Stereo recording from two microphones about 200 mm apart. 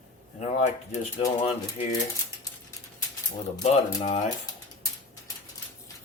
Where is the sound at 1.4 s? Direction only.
30° left (ahead or behind).